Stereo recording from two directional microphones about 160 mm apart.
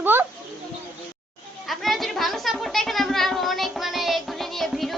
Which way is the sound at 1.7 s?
Centre (ahead or behind).